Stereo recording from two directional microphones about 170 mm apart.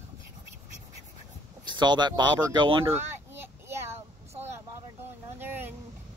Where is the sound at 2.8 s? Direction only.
15° right (ahead or behind).